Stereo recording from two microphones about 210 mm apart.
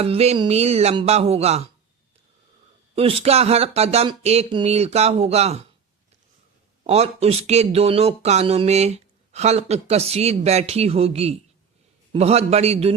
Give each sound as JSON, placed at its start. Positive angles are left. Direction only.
{"t": 0.0, "sound": "speech", "side_deg": -30}
{"t": 2.9, "sound": "speech", "side_deg": -25}
{"t": 6.8, "sound": "speech", "side_deg": -30}